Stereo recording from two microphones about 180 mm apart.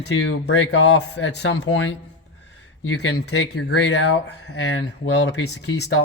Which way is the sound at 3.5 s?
70° left (ahead or behind).